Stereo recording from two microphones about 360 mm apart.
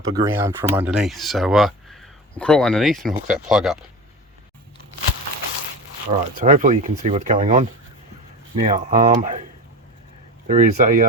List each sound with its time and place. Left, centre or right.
0.0 s speech: centre
6.1 s speech: centre
10.4 s speech: right